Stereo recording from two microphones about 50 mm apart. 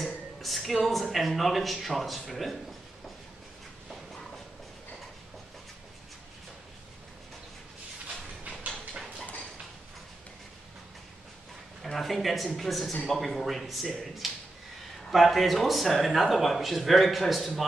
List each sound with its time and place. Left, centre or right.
0.0 s a sound: centre
1.1 s speech: centre
11.8 s speech: centre